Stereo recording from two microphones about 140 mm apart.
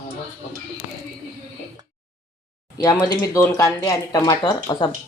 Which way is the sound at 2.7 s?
25° left (ahead or behind).